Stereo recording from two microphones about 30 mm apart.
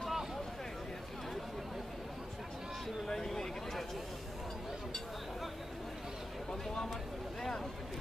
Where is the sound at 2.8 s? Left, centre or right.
Centre.